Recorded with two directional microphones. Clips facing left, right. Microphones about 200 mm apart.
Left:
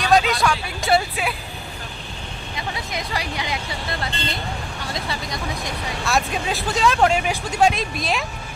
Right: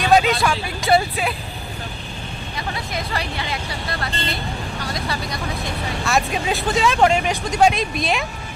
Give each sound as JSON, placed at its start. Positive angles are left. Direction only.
{"t": 0.0, "sound": "vehicle", "side_deg": 0}
{"t": 2.5, "sound": "vehicle", "side_deg": 15}
{"t": 6.0, "sound": "speech", "side_deg": 0}